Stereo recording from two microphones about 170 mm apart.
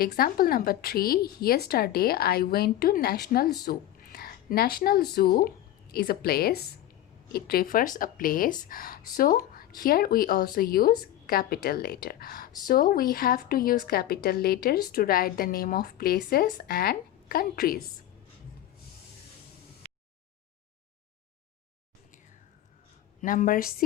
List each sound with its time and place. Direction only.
0.0 s speech: 60° left (ahead or behind)
23.2 s speech: 55° left (ahead or behind)